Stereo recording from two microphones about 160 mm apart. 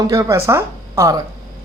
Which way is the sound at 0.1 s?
20° right (ahead or behind).